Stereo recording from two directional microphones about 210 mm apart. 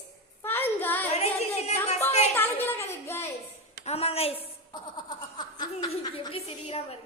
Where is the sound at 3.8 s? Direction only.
30° left (ahead or behind).